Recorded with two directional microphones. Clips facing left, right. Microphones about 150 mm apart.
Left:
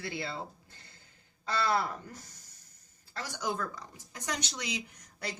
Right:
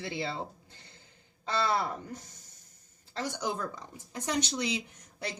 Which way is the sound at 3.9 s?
25° right (ahead or behind).